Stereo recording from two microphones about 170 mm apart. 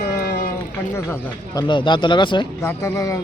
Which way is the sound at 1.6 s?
30° left (ahead or behind).